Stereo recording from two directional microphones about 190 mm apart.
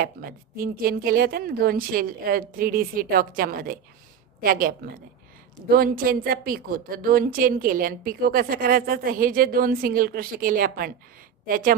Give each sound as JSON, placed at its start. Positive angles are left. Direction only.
{"t": 0.0, "sound": "a woman's voice", "side_deg": -50}